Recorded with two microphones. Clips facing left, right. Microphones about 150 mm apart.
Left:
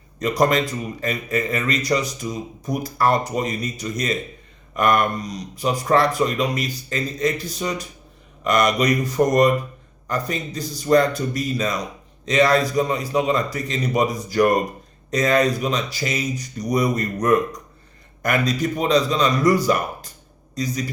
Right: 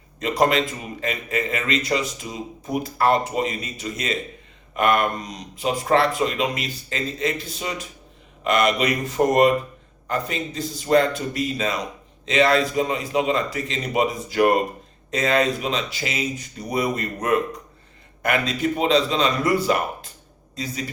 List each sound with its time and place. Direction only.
0.2 s speech: 40° left (ahead or behind)